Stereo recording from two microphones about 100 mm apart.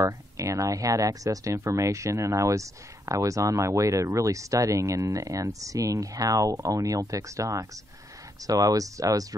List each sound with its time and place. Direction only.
0.0 s speech: 30° right (ahead or behind)